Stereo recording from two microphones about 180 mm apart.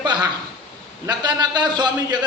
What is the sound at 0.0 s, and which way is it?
A man's voice, 25° right (ahead or behind).